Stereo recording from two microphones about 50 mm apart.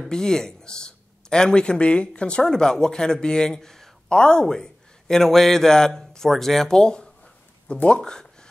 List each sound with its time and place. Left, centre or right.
0.0 s speech: centre